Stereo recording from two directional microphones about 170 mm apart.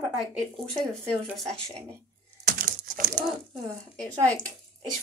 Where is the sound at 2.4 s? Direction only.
50° right (ahead or behind).